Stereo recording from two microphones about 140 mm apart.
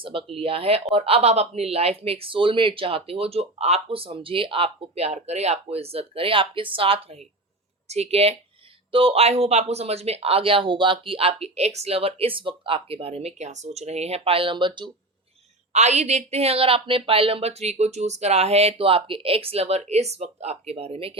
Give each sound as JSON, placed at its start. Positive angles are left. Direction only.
{"t": 0.0, "sound": "speech", "side_deg": -40}
{"t": 15.7, "sound": "speech", "side_deg": -55}